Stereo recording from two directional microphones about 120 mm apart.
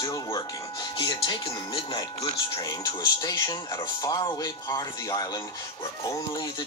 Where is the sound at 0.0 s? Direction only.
35° left (ahead or behind).